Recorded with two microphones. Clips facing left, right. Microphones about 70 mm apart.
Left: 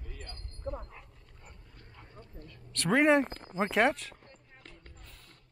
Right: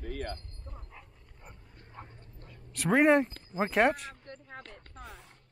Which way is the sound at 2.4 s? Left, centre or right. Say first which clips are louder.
Right 1 dB; centre.